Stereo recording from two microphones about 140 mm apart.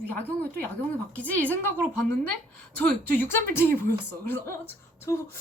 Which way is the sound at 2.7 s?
15° left (ahead or behind).